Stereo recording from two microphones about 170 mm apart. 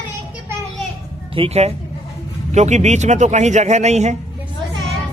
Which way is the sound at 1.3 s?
35° right (ahead or behind).